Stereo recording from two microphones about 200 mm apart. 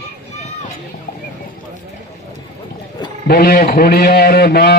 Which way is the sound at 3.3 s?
45° left (ahead or behind).